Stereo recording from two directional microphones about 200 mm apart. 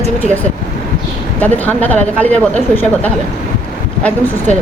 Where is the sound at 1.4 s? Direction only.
10° left (ahead or behind).